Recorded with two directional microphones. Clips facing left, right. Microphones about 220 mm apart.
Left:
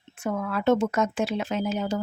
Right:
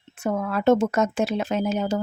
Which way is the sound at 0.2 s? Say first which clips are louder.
Right 3 dB; 40° right (ahead or behind).